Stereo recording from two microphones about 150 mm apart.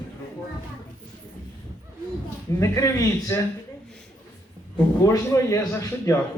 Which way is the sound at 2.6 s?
20° left (ahead or behind).